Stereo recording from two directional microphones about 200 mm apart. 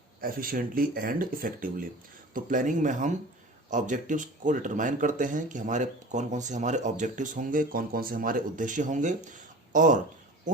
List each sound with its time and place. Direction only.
0.2 s speech: 45° right (ahead or behind)